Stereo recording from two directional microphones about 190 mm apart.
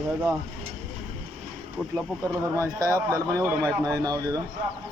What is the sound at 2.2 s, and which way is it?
Speech, 15° right (ahead or behind).